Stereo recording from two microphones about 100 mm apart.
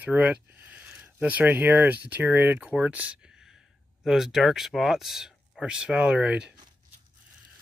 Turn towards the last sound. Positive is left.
turn(degrees=-10)  # may be behind; listen again after turning